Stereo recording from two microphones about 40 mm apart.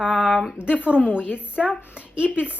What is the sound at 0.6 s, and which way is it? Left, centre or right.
Speech, right.